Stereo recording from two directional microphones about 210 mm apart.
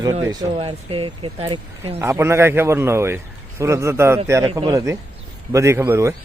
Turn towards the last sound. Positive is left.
turn(degrees=-10)  # may be behind; listen again after turning